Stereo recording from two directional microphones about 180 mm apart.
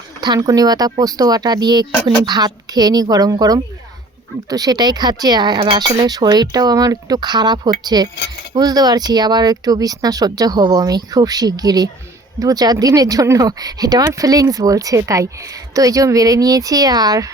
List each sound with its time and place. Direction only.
0.2 s speech: 20° right (ahead or behind)